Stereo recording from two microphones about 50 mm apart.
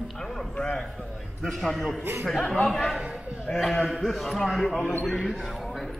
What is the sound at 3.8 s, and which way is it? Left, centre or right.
Speech, centre.